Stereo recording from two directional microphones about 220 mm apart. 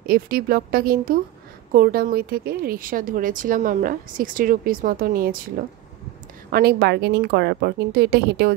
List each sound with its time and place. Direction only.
0.0 s a woman's voice: 45° right (ahead or behind)
6.5 s a woman's voice: 45° right (ahead or behind)